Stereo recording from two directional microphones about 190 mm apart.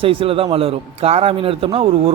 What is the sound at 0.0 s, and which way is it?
Speech, 30° right (ahead or behind).